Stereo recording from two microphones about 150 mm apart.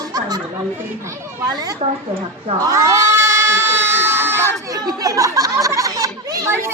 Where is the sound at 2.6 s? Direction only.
20° right (ahead or behind).